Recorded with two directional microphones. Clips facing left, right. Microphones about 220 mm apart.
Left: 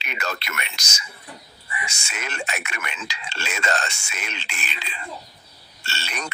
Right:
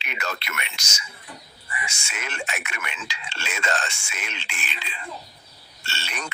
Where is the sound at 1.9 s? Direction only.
40° left (ahead or behind).